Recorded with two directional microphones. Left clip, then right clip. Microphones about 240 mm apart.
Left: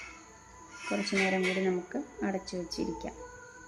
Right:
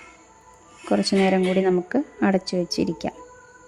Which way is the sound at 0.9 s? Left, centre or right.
Right.